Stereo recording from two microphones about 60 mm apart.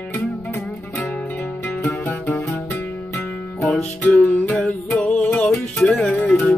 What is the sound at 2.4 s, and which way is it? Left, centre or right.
Music, left.